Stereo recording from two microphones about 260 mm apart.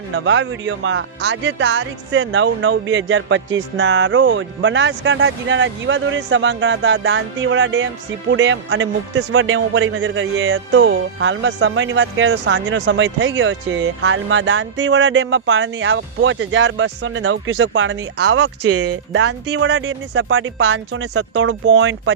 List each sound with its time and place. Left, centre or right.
0.1 s a man's voice: right
19.2 s a man's voice: right